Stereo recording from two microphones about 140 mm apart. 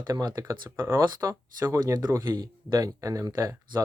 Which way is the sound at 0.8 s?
20° right (ahead or behind).